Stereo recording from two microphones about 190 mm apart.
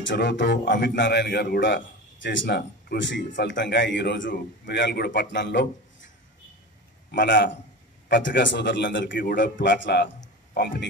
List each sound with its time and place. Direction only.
0.0 s a man's voice: 65° left (ahead or behind)
7.1 s a man's voice: 65° left (ahead or behind)